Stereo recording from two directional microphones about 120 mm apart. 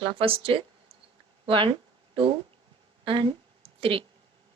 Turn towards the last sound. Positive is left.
turn(degrees=-50)  # may be behind; listen again after turning